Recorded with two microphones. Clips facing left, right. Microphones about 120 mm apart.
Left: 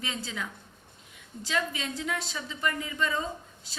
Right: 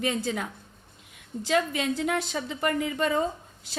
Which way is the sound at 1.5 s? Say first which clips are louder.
Right 6 dB; 55° right (ahead or behind).